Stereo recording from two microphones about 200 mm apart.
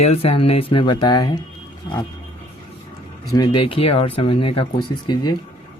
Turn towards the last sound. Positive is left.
turn(degrees=20)  # may be behind; listen again after turning